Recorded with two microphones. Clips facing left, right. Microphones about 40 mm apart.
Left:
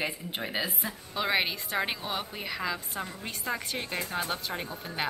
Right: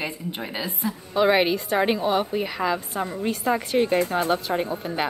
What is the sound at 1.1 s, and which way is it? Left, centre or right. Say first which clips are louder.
A woman's voice: right 9 dB; centre.